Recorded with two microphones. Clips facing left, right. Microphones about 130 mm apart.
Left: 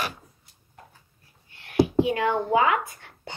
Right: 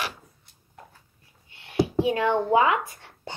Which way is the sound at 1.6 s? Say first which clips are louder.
Left 2 dB; 25° right (ahead or behind).